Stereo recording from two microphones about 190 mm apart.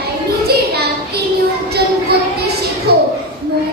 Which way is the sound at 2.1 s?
55° right (ahead or behind).